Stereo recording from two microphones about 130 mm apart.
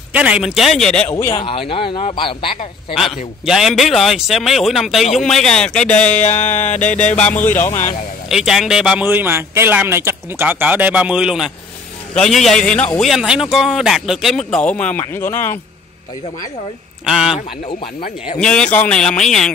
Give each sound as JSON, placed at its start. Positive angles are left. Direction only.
{"t": 0.1, "sound": "speech", "side_deg": -10}
{"t": 1.0, "sound": "speech", "side_deg": 15}
{"t": 1.3, "sound": "speech", "side_deg": 40}
{"t": 2.9, "sound": "speech", "side_deg": 0}
{"t": 6.8, "sound": "music", "side_deg": 65}
{"t": 7.1, "sound": "speech", "side_deg": 10}
{"t": 8.3, "sound": "speech", "side_deg": -5}
{"t": 9.0, "sound": "speech", "side_deg": -15}
{"t": 13.1, "sound": "speech", "side_deg": -5}
{"t": 17.0, "sound": "speech", "side_deg": -5}
{"t": 18.4, "sound": "speech", "side_deg": 5}